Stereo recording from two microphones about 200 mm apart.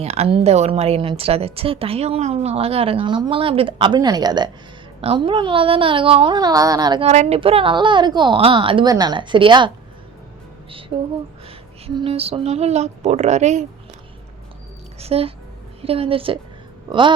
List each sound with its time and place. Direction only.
0.0 s a woman's voice: 30° right (ahead or behind)
7.0 s a woman's voice: 35° right (ahead or behind)
10.7 s music: 25° right (ahead or behind)
11.9 s speech: 30° right (ahead or behind)
14.9 s a child's voice: 30° right (ahead or behind)